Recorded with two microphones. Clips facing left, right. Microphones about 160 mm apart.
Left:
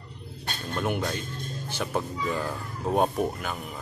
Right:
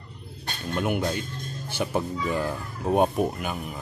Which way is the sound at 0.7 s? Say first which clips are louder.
Right 3 dB; 10° right (ahead or behind).